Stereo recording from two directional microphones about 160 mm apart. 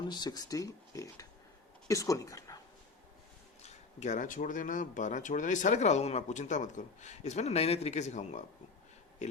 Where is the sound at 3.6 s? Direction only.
50° left (ahead or behind).